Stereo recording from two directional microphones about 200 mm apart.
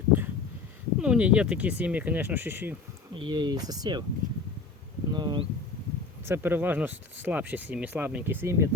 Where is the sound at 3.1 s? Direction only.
20° right (ahead or behind).